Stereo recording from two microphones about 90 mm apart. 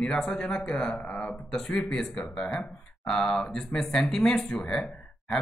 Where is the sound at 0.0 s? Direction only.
10° left (ahead or behind).